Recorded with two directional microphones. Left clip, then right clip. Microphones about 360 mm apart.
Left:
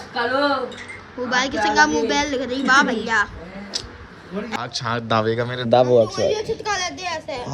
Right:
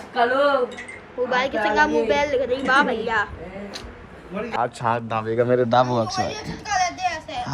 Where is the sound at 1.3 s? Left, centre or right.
Centre.